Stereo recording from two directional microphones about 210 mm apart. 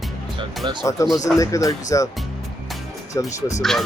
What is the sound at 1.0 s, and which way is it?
Speech, 15° left (ahead or behind).